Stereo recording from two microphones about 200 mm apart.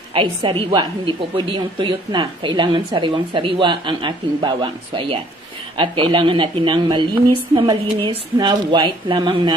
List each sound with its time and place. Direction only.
0.1 s a woman's voice: 25° right (ahead or behind)